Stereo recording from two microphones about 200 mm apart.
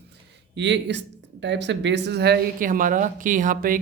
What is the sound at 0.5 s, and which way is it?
Speech, 60° right (ahead or behind).